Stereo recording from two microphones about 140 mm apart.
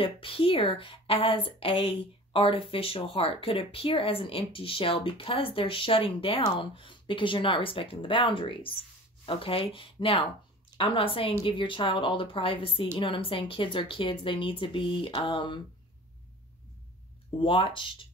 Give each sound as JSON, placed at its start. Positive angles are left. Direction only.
{"t": 0.0, "sound": "a woman's voice", "side_deg": 40}
{"t": 17.4, "sound": "a woman's voice", "side_deg": 40}